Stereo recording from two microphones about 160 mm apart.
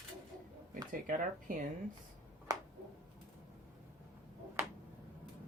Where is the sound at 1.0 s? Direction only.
60° right (ahead or behind).